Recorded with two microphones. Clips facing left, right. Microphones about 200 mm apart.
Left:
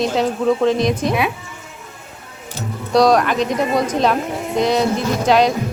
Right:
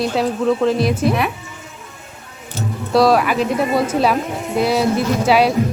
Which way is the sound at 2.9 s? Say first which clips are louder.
Even; 5° right (ahead or behind).